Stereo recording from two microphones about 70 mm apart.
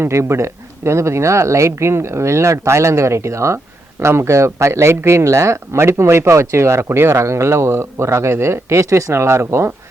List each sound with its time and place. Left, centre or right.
0.0 s speech: right